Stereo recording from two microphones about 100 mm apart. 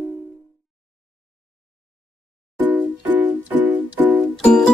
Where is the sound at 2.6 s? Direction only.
20° right (ahead or behind).